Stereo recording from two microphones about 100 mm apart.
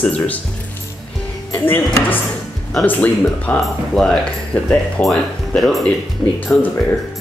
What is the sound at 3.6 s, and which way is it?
Speech, centre (ahead or behind).